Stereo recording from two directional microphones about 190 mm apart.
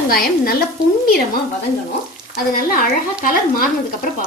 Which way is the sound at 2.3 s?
50° left (ahead or behind).